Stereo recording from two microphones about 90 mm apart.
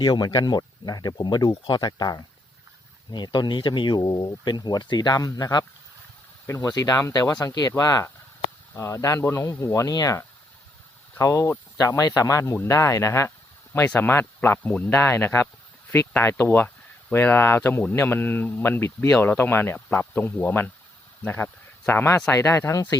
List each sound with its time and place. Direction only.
0.0 s speech: 55° left (ahead or behind); by 22.9 s 35° left (ahead or behind)